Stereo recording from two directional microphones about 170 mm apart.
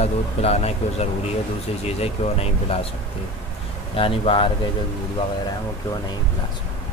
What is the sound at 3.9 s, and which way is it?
Speech, 35° left (ahead or behind).